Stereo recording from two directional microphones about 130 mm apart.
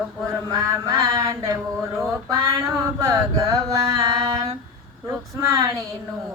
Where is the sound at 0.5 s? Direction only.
25° right (ahead or behind).